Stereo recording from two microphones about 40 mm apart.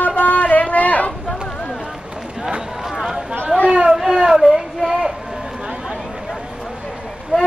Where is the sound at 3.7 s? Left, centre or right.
Centre.